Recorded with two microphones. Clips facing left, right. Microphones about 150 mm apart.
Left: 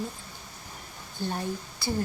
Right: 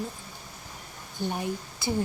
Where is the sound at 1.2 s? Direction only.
15° right (ahead or behind).